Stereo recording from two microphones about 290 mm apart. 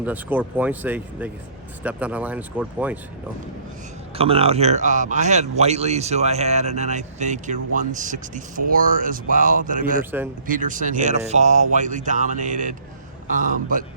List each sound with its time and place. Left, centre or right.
0.0 s speech: centre
4.1 s speech: centre
10.0 s speech: centre
10.5 s speech: right